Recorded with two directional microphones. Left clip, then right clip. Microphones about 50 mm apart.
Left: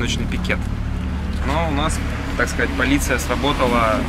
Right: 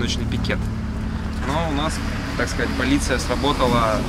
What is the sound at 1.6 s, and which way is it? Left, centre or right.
Speech, left.